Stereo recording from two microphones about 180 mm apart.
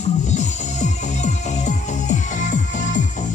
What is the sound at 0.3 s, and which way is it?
Music, 40° left (ahead or behind).